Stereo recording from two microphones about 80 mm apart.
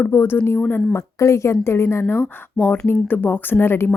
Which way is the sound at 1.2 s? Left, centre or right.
Left.